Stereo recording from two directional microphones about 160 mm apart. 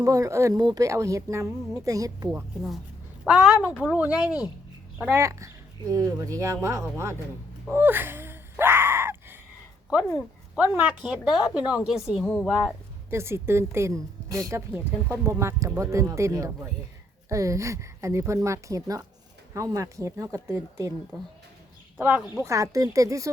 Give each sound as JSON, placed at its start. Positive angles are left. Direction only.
{"t": 0.0, "sound": "a woman's voice", "side_deg": -20}
{"t": 3.2, "sound": "a woman's voice", "side_deg": 0}
{"t": 7.7, "sound": "a sound", "side_deg": -10}
{"t": 10.2, "sound": "a woman's voice", "side_deg": -5}
{"t": 13.1, "sound": "a woman's voice", "side_deg": -15}
{"t": 21.9, "sound": "a woman's voice", "side_deg": -15}